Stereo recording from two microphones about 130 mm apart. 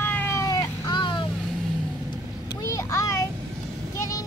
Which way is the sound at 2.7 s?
25° left (ahead or behind).